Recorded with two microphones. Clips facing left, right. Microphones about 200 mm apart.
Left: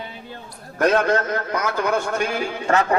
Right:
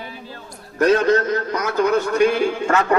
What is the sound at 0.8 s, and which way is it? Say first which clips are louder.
A man's voice: right 3 dB; 55° left (ahead or behind).